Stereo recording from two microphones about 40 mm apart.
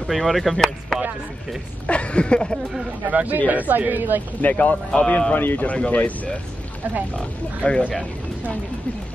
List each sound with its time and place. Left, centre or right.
0.1 s speech: centre
1.9 s a sound: left
3.1 s speech: right
4.4 s speech: left
5.3 s speech: left
5.7 s speech: left
7.6 s a sound: left